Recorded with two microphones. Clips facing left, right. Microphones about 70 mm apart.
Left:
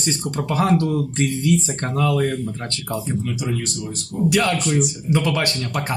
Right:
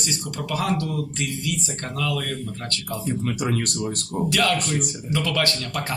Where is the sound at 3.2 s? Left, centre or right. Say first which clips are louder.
Right 1 dB; right.